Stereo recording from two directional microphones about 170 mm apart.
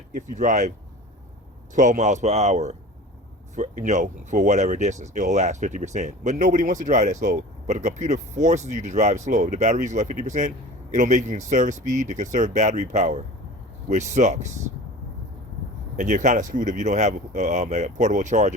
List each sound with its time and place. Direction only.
0.1 s speech: 45° right (ahead or behind)
1.7 s speech: 45° right (ahead or behind)
16.0 s speech: 50° right (ahead or behind)